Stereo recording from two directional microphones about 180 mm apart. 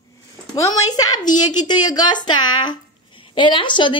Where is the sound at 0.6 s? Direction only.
20° left (ahead or behind).